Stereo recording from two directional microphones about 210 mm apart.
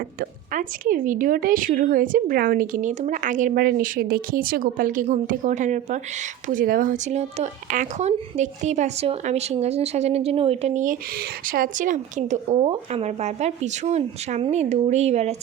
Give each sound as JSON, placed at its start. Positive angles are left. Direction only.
{"t": 0.0, "sound": "a woman's voice", "side_deg": -40}